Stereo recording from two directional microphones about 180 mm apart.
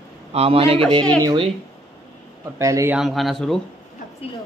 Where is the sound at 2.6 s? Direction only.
15° right (ahead or behind).